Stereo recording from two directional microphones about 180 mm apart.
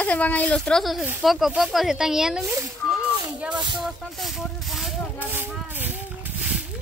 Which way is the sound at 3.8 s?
Centre (ahead or behind).